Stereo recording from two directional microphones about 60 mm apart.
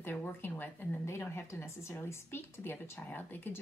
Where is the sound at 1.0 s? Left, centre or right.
Left.